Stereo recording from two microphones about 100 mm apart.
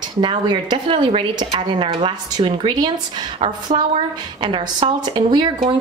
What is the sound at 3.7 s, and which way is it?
A woman's voice, 65° right (ahead or behind).